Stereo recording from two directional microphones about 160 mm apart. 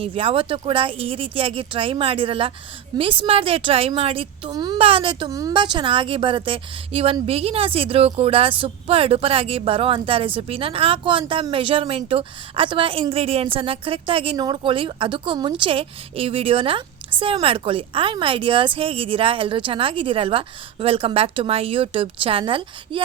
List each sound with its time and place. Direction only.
0.0 s a woman's voice: 35° right (ahead or behind)